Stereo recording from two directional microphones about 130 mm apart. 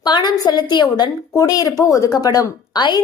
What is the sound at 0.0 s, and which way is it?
A woman's voice, 30° left (ahead or behind).